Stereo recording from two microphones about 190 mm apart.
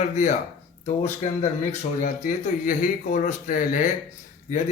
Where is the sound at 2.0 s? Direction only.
45° left (ahead or behind).